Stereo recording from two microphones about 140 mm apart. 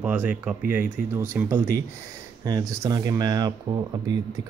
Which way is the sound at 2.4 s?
25° right (ahead or behind).